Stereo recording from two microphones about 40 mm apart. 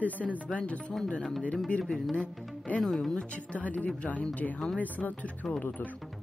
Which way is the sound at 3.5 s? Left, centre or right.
Left.